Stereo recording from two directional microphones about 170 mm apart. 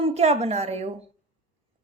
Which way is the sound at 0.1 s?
40° right (ahead or behind).